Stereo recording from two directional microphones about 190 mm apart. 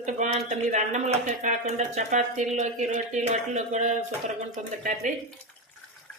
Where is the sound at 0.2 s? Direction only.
40° right (ahead or behind).